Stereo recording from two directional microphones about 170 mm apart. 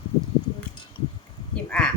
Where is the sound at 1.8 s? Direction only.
5° left (ahead or behind).